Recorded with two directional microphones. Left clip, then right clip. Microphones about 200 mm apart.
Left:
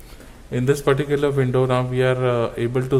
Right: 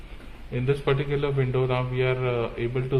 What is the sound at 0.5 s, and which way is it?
A man's voice, 60° left (ahead or behind).